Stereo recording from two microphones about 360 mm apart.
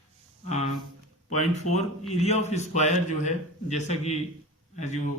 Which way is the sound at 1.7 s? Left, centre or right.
Left.